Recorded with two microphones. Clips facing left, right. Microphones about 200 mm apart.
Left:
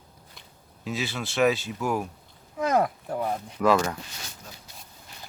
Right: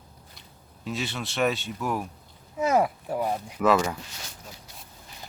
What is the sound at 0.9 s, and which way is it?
Speech, centre (ahead or behind).